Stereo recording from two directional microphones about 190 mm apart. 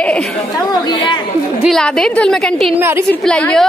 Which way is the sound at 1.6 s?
5° left (ahead or behind).